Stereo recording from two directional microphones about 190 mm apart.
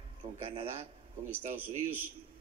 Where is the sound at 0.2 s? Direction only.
30° right (ahead or behind).